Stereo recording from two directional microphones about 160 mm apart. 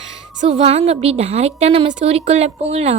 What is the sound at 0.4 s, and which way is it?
A woman's voice, 40° right (ahead or behind).